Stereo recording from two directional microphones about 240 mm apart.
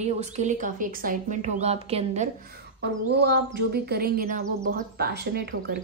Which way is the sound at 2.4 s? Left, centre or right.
Right.